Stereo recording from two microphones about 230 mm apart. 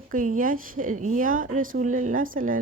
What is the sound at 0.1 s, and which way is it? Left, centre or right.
A woman's voice, right.